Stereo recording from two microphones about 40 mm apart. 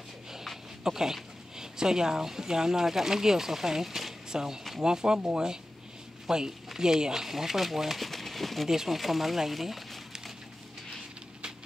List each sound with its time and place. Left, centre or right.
0.8 s speech: centre
6.2 s speech: centre
8.6 s speech: centre